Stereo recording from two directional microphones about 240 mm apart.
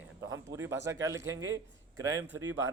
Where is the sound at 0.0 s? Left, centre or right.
Centre.